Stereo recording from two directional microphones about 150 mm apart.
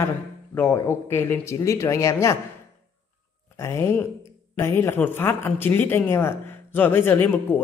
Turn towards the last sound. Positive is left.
turn(degrees=15)  # may be behind; listen again after turning